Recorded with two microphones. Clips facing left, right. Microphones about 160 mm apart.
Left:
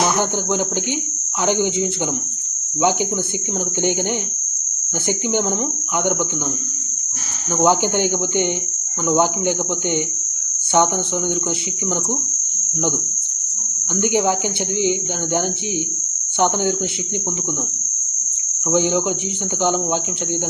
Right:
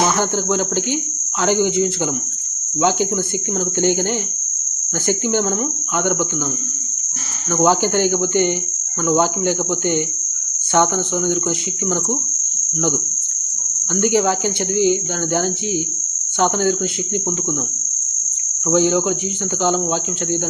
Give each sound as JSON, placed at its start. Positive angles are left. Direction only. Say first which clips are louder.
{"t": 0.2, "sound": "cricket", "louder": "right 1 dB", "side_deg": 15}
{"t": 5.0, "sound": "cricket", "louder": "right 2 dB", "side_deg": 15}
{"t": 7.5, "sound": "cricket", "louder": "right 1 dB", "side_deg": 15}
{"t": 13.9, "sound": "cricket", "louder": "right 2 dB", "side_deg": 15}
{"t": 18.7, "sound": "cricket", "louder": "right 2 dB", "side_deg": 15}